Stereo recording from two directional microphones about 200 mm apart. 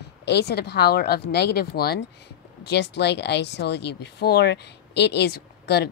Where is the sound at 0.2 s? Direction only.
55° left (ahead or behind).